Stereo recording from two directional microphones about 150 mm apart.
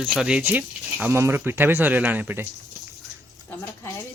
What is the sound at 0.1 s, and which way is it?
Speech, 5° right (ahead or behind).